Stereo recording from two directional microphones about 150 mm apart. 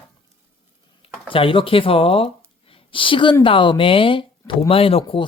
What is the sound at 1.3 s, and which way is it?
Speech, 35° left (ahead or behind).